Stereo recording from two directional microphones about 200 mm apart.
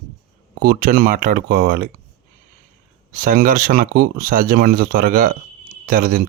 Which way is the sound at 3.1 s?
45° right (ahead or behind).